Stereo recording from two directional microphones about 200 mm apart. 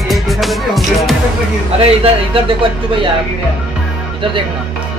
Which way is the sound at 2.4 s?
25° right (ahead or behind).